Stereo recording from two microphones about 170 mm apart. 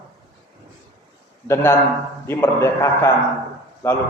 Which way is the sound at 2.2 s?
15° left (ahead or behind).